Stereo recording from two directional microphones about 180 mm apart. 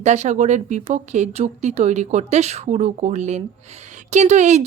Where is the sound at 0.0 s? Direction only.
40° right (ahead or behind).